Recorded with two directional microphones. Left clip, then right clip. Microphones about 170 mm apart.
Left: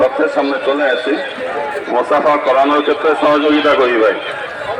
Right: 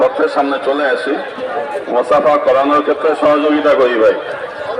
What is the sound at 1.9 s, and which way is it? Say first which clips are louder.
A man's voice: right 1 dB; 40° right (ahead or behind).